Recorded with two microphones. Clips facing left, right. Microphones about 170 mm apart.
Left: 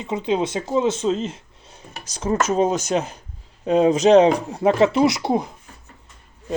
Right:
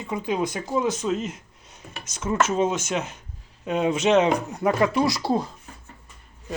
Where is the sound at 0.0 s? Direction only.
20° left (ahead or behind).